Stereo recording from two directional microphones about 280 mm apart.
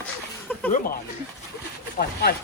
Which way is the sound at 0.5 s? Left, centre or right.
Centre.